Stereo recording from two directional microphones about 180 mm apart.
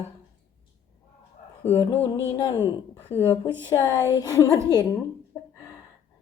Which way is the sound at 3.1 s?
15° left (ahead or behind).